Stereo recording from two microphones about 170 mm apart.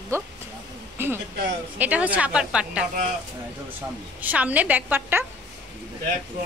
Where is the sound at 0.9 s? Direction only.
15° right (ahead or behind).